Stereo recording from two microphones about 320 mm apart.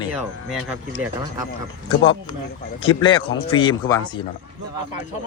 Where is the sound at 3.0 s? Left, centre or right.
Centre.